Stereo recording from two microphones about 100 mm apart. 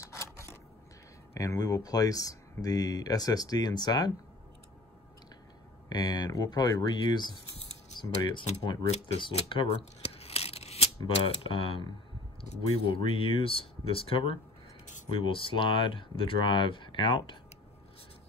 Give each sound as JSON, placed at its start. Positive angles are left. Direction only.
{"t": 0.0, "sound": "a sound", "side_deg": 30}
{"t": 1.3, "sound": "speech", "side_deg": 35}
{"t": 5.9, "sound": "speech", "side_deg": 45}
{"t": 8.9, "sound": "tearing", "side_deg": 75}
{"t": 11.2, "sound": "speech", "side_deg": 65}